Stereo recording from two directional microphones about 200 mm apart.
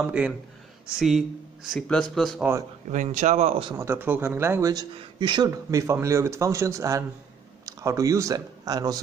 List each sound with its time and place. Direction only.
0.0 s a man's voice: 5° right (ahead or behind)
2.9 s speech: 40° right (ahead or behind)
3.7 s speech: 15° right (ahead or behind)